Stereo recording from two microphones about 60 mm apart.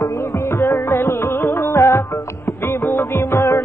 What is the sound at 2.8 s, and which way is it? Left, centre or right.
Music, left.